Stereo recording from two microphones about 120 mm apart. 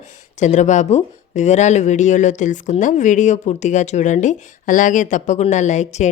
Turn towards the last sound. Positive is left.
turn(degrees=80)